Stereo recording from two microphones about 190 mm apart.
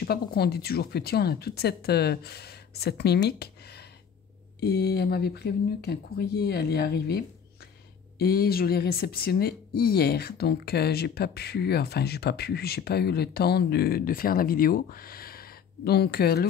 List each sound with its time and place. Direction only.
0.0 s speech: 55° left (ahead or behind)
4.6 s speech: 60° left (ahead or behind)